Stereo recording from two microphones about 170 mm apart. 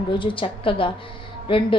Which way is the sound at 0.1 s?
30° left (ahead or behind).